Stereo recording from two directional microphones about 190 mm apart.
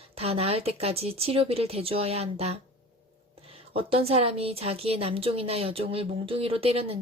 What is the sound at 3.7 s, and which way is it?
A woman's voice, 30° right (ahead or behind).